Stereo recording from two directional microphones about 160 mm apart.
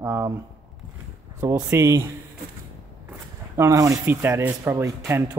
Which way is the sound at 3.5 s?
20° right (ahead or behind).